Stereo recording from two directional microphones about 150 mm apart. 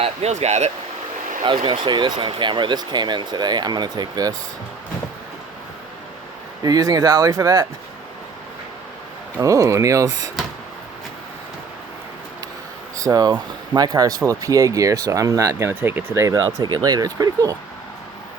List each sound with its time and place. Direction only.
0.0 s speech: 45° right (ahead or behind)
1.4 s speech: 30° right (ahead or behind)
6.6 s speech: 25° right (ahead or behind)
9.4 s speech: 20° right (ahead or behind)
13.0 s speech: 25° right (ahead or behind)